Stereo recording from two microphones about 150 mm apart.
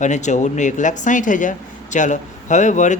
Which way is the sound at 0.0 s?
50° left (ahead or behind).